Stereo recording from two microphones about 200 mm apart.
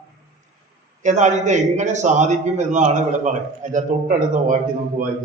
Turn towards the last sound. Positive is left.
turn(degrees=-40)  # may be behind; listen again after turning